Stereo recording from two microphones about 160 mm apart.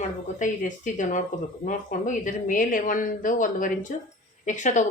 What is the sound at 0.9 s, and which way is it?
Speech, 50° left (ahead or behind).